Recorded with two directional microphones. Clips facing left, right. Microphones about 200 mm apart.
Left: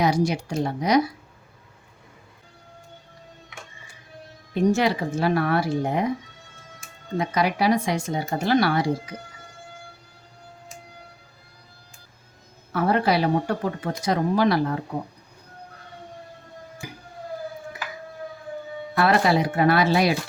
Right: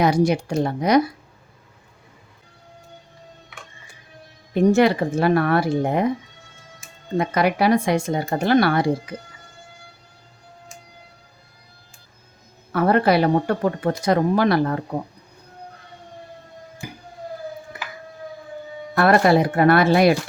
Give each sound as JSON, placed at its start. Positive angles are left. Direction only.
{"t": 0.0, "sound": "speech", "side_deg": -55}
{"t": 4.5, "sound": "speech", "side_deg": -55}
{"t": 7.2, "sound": "speech", "side_deg": -55}
{"t": 12.7, "sound": "speech", "side_deg": -55}
{"t": 18.9, "sound": "speech", "side_deg": -55}